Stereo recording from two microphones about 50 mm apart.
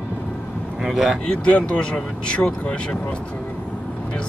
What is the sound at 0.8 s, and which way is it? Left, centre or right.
Speech, centre.